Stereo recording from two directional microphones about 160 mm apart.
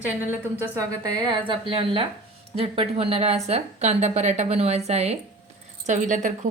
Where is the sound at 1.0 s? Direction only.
30° right (ahead or behind).